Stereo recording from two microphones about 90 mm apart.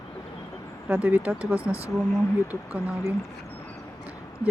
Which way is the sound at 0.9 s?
20° right (ahead or behind).